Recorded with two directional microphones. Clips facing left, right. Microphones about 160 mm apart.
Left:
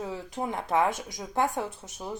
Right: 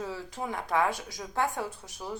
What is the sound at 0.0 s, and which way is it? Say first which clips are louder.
Speech: left 3 dB; 20° left (ahead or behind).